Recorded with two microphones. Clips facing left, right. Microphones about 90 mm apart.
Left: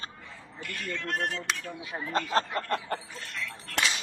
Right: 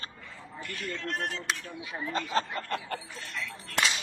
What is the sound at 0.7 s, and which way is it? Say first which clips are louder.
Speech: left 2 dB; 55° left (ahead or behind).